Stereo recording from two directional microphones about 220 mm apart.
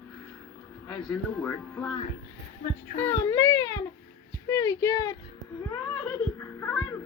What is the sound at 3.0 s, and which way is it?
Speech, 10° left (ahead or behind).